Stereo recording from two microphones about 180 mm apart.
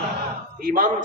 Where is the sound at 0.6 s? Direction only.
50° right (ahead or behind).